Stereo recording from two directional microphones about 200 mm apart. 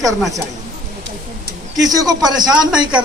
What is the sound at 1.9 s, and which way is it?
Speech, 20° right (ahead or behind).